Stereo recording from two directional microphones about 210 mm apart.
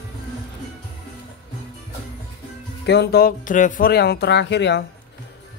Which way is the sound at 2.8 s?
50° left (ahead or behind).